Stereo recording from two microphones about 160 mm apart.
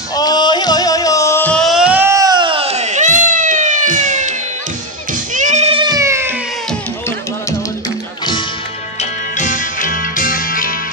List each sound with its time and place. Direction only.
0.1 s music: 25° left (ahead or behind); by 4.4 s 50° right (ahead or behind)
5.3 s cat: 50° right (ahead or behind); by 6.3 s 15° right (ahead or behind)
9.4 s music: 55° left (ahead or behind)